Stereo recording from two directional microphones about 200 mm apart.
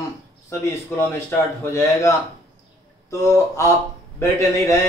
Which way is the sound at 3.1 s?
15° left (ahead or behind).